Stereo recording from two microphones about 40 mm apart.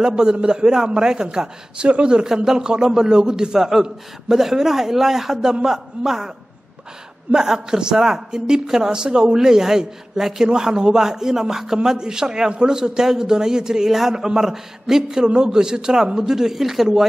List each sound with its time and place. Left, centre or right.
0.0 s a man's voice: centre
2.2 s a man's voice: centre
7.3 s a man's voice: centre